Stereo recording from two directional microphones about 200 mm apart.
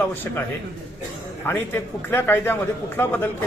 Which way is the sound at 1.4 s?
10° left (ahead or behind).